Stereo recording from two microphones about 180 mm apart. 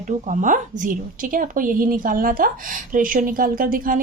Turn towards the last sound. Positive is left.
turn(degrees=-50)  # may be behind; listen again after turning